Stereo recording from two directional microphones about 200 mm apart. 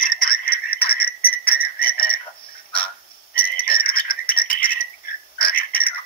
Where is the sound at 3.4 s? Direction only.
5° left (ahead or behind).